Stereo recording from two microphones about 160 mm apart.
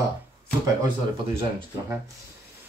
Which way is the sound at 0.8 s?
35° right (ahead or behind).